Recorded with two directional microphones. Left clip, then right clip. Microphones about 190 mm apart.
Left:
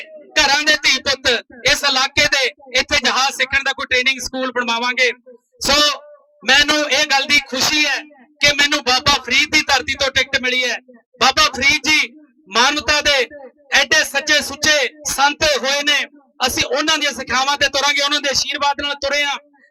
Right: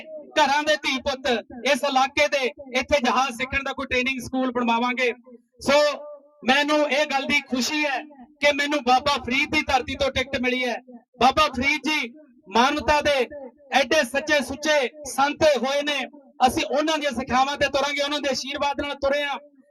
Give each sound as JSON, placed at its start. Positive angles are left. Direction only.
{"t": 0.0, "sound": "a man's voice", "side_deg": -55}